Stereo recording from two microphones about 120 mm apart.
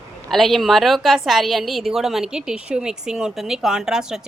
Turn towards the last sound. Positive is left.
turn(degrees=-5)  # may be behind; listen again after turning